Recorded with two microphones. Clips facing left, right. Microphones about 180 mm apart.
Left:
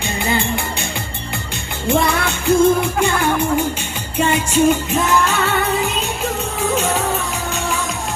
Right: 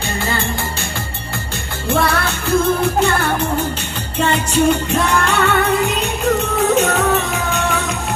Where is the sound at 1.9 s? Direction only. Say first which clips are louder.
Right 1 dB; 15° left (ahead or behind).